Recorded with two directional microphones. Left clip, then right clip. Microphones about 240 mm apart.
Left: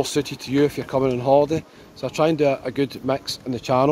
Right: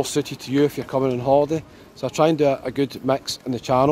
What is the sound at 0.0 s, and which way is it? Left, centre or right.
Speech, centre.